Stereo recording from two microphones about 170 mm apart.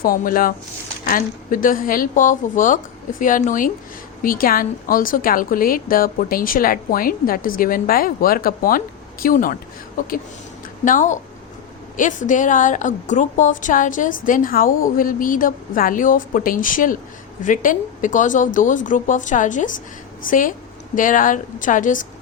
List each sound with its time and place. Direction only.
0.0 s a woman's voice: 55° left (ahead or behind)
10.8 s a woman's voice: 50° left (ahead or behind)